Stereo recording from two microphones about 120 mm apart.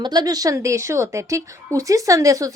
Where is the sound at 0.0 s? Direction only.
35° right (ahead or behind).